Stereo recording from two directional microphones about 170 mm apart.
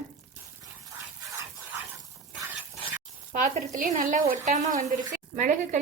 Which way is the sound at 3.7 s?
50° right (ahead or behind).